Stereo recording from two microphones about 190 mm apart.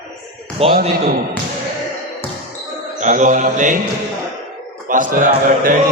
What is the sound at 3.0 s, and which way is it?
Mantra, 40° right (ahead or behind).